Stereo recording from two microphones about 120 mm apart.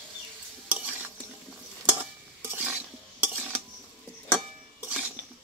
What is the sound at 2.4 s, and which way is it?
Stir, 15° right (ahead or behind).